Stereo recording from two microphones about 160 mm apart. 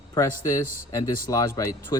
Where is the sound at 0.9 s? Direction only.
20° left (ahead or behind).